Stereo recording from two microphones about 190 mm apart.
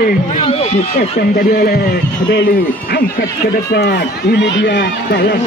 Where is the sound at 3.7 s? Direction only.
60° left (ahead or behind).